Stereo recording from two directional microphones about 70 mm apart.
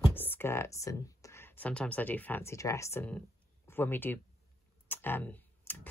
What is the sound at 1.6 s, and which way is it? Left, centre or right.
Speech, centre.